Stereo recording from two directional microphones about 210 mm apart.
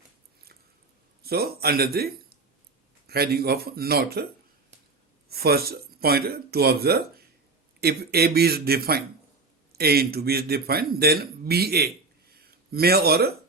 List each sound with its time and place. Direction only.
1.2 s a man's voice: 45° right (ahead or behind)
5.3 s speech: 45° right (ahead or behind)
12.3 s a sound: 45° right (ahead or behind)